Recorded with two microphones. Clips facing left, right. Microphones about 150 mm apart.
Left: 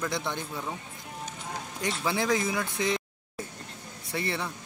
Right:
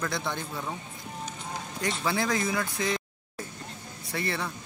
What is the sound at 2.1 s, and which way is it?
Speech, 15° left (ahead or behind).